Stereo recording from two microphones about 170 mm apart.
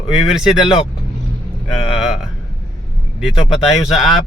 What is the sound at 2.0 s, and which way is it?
Speech, centre (ahead or behind).